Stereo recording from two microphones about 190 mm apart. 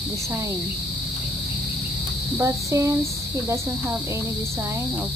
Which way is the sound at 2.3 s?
15° right (ahead or behind).